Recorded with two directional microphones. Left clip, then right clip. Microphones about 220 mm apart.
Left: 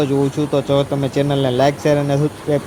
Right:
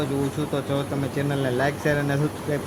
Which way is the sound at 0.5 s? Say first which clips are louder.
Left 12 dB; 20° left (ahead or behind).